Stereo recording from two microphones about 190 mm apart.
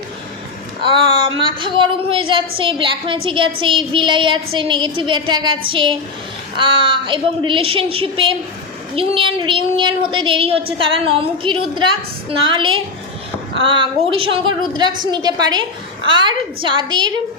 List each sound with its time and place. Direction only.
0.8 s a woman's voice: 25° right (ahead or behind)